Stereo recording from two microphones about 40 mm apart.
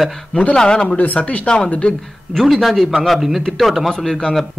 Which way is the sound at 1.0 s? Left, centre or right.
Left.